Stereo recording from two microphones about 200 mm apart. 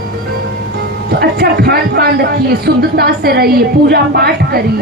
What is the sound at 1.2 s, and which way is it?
A man's voice, 55° right (ahead or behind).